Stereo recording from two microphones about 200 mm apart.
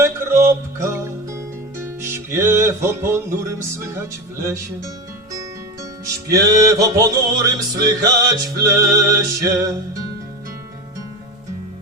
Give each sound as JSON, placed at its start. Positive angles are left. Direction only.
{"t": 0.0, "sound": "music", "side_deg": -15}
{"t": 6.3, "sound": "music", "side_deg": -15}